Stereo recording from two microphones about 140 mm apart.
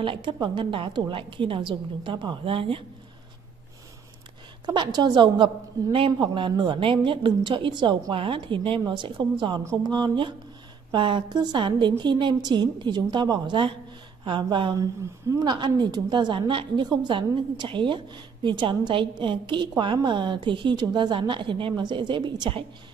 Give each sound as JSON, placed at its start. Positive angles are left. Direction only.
{"t": 0.0, "sound": "a woman's voice", "side_deg": -35}
{"t": 4.6, "sound": "a woman's voice", "side_deg": -30}